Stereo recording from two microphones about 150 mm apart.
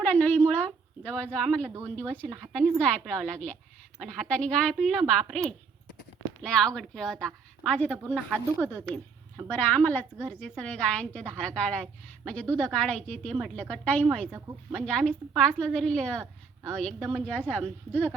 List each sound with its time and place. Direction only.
0.0 s a sound: 10° left (ahead or behind)
2.1 s a woman's voice: 5° left (ahead or behind)
14.3 s speech: 15° right (ahead or behind)
14.7 s a woman's voice: 5° left (ahead or behind)